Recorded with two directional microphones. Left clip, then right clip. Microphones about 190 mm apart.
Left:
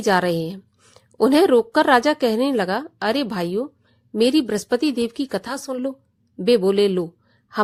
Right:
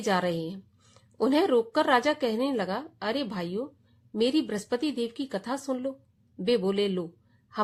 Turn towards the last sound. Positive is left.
turn(degrees=40)  # may be behind; listen again after turning